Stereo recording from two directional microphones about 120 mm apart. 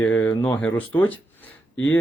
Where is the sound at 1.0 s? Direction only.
15° left (ahead or behind).